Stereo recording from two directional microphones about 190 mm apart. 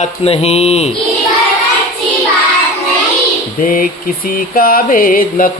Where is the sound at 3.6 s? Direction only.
45° left (ahead or behind).